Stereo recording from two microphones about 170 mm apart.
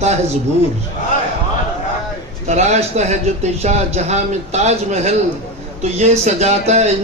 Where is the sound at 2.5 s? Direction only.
40° right (ahead or behind).